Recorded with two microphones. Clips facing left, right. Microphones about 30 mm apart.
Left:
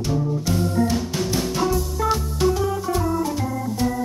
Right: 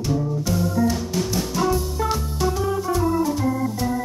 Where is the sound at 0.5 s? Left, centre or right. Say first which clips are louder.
Even; left.